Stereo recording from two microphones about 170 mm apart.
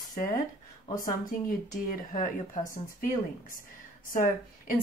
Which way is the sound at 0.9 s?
55° left (ahead or behind).